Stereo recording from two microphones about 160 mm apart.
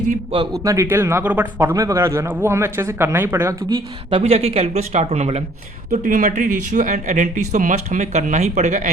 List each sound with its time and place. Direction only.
0.3 s speech: 20° right (ahead or behind)
1.6 s speech: 20° right (ahead or behind)
3.7 s speech: 35° right (ahead or behind)